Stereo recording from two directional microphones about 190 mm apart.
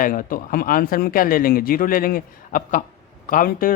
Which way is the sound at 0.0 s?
45° left (ahead or behind).